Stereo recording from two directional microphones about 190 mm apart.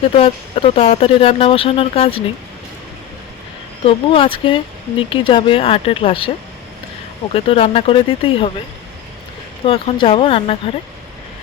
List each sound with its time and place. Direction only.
0.0 s speech: 30° left (ahead or behind)
3.8 s speech: 30° left (ahead or behind)
7.3 s speech: 30° left (ahead or behind)
9.6 s speech: 30° left (ahead or behind)